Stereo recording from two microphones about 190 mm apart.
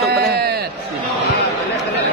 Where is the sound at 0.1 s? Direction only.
55° right (ahead or behind).